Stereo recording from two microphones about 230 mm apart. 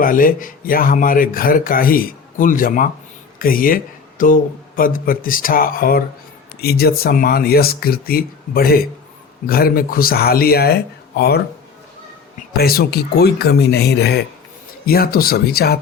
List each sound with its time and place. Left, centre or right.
0.0 s speech: left
12.5 s speech: left